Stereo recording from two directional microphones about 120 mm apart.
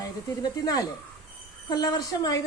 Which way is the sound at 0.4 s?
30° left (ahead or behind).